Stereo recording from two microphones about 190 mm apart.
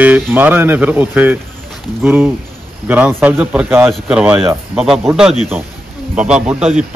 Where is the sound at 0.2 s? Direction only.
10° right (ahead or behind).